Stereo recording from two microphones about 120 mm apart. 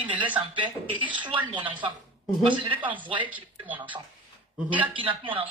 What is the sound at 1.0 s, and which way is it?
Speech, 40° right (ahead or behind).